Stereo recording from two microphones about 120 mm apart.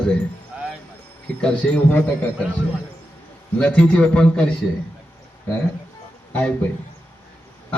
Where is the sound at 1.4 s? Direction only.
10° left (ahead or behind).